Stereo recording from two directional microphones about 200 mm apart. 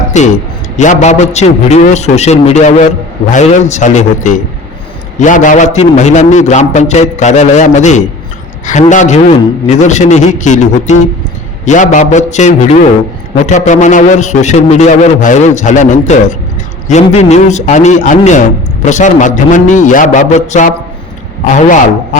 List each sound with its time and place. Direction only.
0.1 s a man's voice: 35° left (ahead or behind)